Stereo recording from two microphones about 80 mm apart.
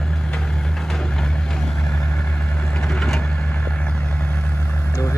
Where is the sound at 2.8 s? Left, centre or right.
Centre.